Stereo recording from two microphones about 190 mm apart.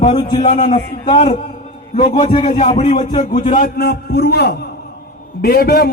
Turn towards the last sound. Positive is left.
turn(degrees=55)  # may be behind; listen again after turning